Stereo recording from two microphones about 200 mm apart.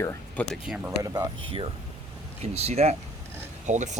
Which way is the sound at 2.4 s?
30° right (ahead or behind).